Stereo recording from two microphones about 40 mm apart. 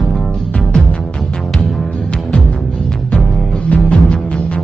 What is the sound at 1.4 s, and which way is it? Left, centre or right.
Music, centre.